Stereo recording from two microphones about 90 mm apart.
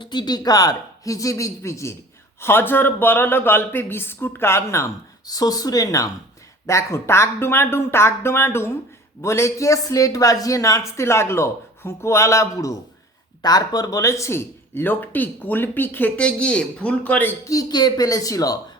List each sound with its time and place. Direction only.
0.0 s speech: 55° left (ahead or behind); by 4.9 s 30° left (ahead or behind)
5.2 s speech: 45° left (ahead or behind); by 17.3 s 20° left (ahead or behind)
17.4 s speech: 40° left (ahead or behind)